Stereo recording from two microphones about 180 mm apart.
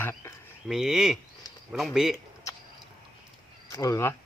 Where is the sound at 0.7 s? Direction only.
Centre (ahead or behind).